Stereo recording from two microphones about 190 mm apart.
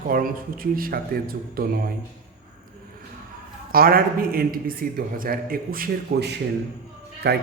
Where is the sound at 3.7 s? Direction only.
50° right (ahead or behind).